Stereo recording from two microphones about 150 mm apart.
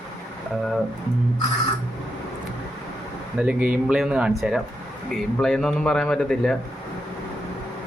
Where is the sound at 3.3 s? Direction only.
10° right (ahead or behind).